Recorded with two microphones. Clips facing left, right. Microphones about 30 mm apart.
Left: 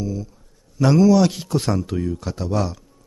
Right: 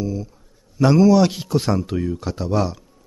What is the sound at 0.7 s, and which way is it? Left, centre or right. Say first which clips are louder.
A man's voice: right 1 dB; centre.